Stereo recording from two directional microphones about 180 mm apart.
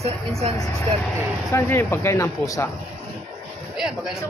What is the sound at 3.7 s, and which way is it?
Speech, centre (ahead or behind).